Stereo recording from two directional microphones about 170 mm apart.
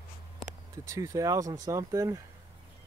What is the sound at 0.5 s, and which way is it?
Speech, 15° right (ahead or behind).